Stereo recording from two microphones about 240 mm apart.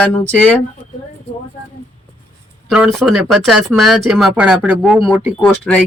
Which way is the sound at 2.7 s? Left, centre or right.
Centre.